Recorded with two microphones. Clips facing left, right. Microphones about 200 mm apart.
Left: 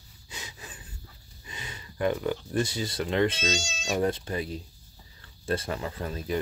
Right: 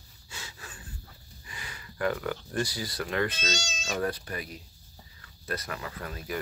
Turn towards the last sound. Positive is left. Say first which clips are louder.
# left 5 dB
turn(degrees=25)  # may be behind; listen again after turning